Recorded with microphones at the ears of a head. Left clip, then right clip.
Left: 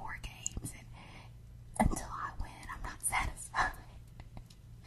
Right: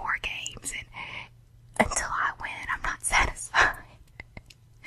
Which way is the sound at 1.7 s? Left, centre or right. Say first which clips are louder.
Right 10 dB; right.